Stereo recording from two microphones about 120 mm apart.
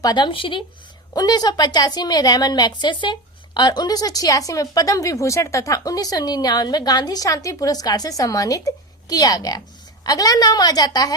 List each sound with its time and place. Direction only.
0.0 s speech: 35° left (ahead or behind)
1.1 s speech: 35° left (ahead or behind)